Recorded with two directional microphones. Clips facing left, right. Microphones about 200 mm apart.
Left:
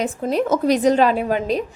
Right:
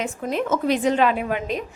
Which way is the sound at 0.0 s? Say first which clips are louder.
Left 4 dB; 35° left (ahead or behind).